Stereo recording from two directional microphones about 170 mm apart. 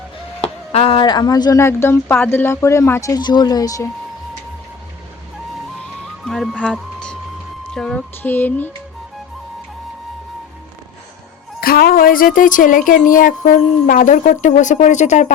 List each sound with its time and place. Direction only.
0.4 s speech: 35° left (ahead or behind); by 3.8 s 20° left (ahead or behind)
6.2 s music: centre (ahead or behind)
7.7 s speech: 5° left (ahead or behind)
11.6 s speech: 60° left (ahead or behind); by 15.3 s 45° left (ahead or behind)